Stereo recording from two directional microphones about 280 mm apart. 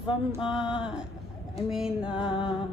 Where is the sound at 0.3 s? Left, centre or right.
Centre.